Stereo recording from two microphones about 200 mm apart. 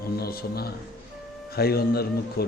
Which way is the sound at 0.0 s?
50° left (ahead or behind).